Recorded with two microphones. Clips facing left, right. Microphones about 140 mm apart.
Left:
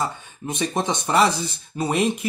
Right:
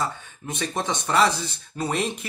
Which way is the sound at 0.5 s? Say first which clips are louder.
Left 4 dB; 20° left (ahead or behind).